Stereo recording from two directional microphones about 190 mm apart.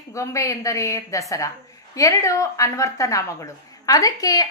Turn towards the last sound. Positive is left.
turn(degrees=20)  # may be behind; listen again after turning